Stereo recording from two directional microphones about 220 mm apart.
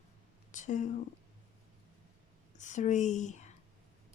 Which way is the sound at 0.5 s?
35° left (ahead or behind).